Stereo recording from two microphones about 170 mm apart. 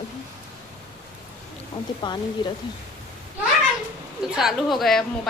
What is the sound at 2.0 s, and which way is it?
Speech, 25° left (ahead or behind).